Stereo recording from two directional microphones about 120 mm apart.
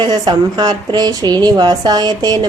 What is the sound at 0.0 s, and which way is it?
Speech, 35° right (ahead or behind).